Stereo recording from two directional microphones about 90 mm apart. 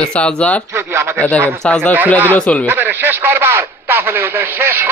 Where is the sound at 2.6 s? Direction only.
20° right (ahead or behind).